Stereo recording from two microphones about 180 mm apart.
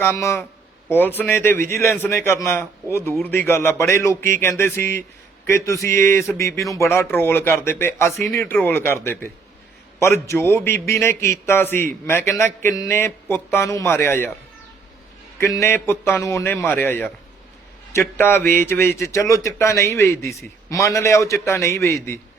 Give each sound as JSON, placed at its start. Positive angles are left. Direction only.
{"t": 0.0, "sound": "a man's voice", "side_deg": 15}
{"t": 15.4, "sound": "a man's voice", "side_deg": 15}